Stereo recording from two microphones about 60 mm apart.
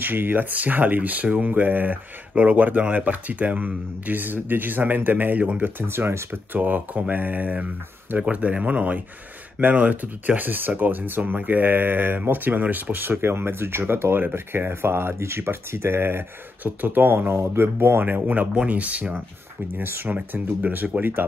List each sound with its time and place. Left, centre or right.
0.0 s speech: right
5.8 s speech: right
17.3 s speech: right
19.8 s speech: right
20.2 s speech: right